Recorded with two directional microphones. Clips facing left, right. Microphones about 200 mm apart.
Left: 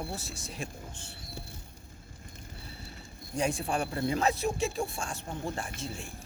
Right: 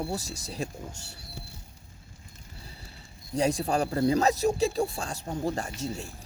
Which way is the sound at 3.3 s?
35° right (ahead or behind).